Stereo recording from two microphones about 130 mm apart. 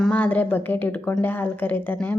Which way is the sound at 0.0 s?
10° left (ahead or behind).